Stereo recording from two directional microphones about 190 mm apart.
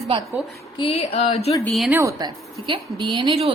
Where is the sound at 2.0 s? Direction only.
20° right (ahead or behind).